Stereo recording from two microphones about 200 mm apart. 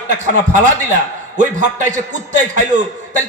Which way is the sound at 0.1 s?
40° right (ahead or behind).